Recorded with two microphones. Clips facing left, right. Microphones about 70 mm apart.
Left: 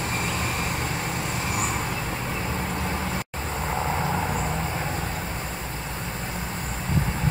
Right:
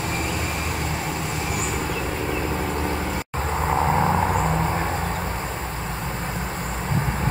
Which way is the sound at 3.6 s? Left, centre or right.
Right.